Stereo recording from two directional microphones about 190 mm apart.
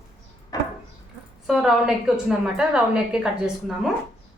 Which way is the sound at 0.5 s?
20° left (ahead or behind).